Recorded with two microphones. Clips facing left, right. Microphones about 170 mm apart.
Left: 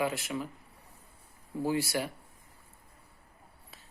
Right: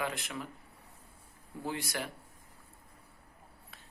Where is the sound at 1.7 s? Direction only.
5° left (ahead or behind).